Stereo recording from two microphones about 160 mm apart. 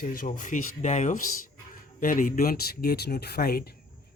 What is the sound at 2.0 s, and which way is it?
Speech, 60° left (ahead or behind).